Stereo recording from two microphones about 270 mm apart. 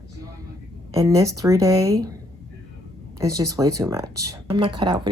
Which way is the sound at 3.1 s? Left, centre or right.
Centre.